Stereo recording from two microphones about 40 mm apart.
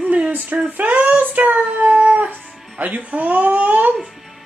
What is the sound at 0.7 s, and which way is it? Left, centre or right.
Speech, right.